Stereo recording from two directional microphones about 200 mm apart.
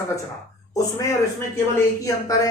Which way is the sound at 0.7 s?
15° left (ahead or behind).